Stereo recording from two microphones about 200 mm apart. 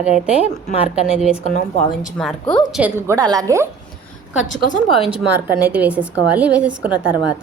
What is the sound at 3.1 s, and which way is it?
Speech, 20° right (ahead or behind).